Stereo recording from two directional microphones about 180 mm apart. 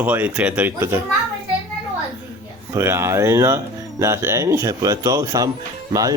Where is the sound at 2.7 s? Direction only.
15° right (ahead or behind).